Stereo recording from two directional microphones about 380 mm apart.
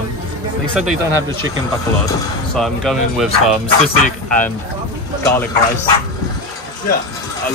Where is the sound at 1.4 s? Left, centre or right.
Right.